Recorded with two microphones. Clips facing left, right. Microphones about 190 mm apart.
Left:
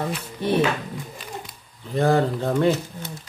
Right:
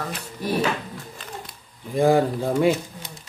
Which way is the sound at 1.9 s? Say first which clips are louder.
Right 2 dB; 10° right (ahead or behind).